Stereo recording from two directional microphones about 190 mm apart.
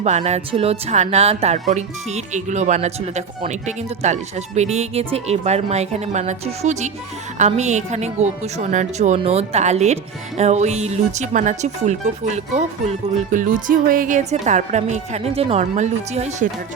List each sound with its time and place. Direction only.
0.0 s a woman's voice: 35° right (ahead or behind)